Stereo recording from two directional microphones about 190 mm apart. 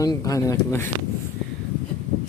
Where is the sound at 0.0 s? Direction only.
20° left (ahead or behind).